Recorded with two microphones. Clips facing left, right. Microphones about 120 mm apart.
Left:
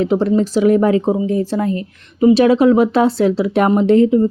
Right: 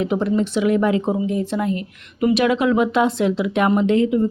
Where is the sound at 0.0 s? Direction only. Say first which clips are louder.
Left 5 dB; 35° left (ahead or behind).